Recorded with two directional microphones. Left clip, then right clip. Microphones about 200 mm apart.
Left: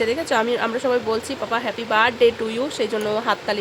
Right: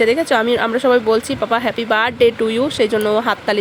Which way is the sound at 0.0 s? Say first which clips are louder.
Right 6 dB; 30° right (ahead or behind).